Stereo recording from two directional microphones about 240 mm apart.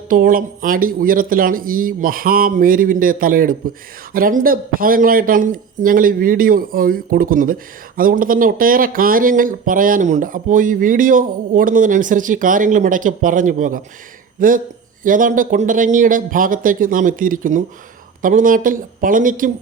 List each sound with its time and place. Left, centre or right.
0.1 s speech: right